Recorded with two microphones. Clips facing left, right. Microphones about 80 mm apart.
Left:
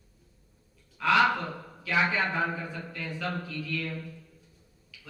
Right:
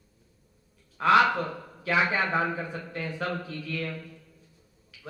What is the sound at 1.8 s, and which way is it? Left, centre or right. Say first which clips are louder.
Speech: right 2 dB; right.